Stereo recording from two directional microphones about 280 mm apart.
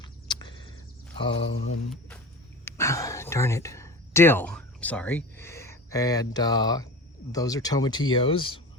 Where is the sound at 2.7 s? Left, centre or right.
Centre.